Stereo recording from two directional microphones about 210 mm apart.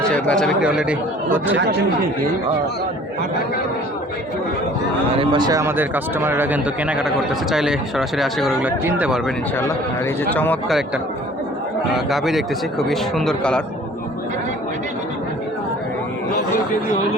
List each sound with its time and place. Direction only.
0.0 s speech: 5° left (ahead or behind)
1.5 s speech: 50° right (ahead or behind)
5.1 s speech: 25° right (ahead or behind); by 9.3 s 5° right (ahead or behind)
10.3 s speech: 10° left (ahead or behind)
11.9 s speech: centre (ahead or behind)